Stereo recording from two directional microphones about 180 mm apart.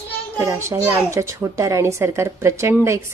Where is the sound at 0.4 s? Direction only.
15° right (ahead or behind).